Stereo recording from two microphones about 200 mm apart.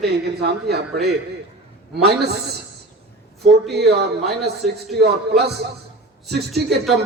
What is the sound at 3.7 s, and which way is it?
A man's voice, 55° right (ahead or behind).